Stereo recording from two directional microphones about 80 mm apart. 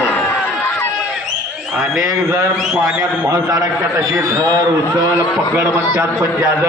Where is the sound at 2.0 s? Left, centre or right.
Right.